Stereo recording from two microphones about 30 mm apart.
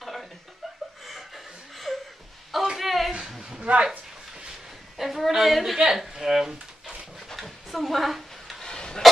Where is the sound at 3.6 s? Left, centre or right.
Right.